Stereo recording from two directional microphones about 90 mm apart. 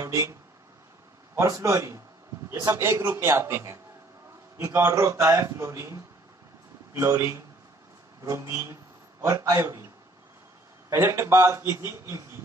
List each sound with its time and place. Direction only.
0.0 s a man's voice: 30° right (ahead or behind)
2.8 s a man's voice: 25° right (ahead or behind); by 9.8 s 45° right (ahead or behind)
10.9 s a man's voice: 30° right (ahead or behind)